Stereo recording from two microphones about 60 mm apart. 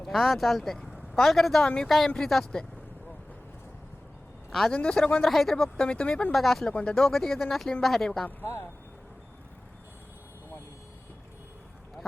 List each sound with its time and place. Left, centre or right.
0.0 s speech: centre
1.6 s speech: centre
4.7 s speech: centre
5.2 s speech: centre
5.8 s speech: centre
6.3 s speech: centre
6.7 s speech: centre